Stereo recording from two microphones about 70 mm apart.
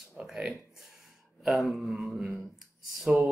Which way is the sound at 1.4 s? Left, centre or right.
Centre.